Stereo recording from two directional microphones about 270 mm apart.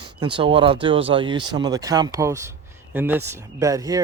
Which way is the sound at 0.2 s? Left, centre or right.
Centre.